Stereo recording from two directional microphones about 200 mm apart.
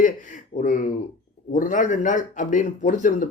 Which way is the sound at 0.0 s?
40° left (ahead or behind).